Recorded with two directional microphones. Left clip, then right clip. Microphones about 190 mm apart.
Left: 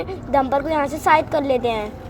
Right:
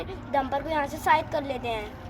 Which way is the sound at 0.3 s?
35° left (ahead or behind).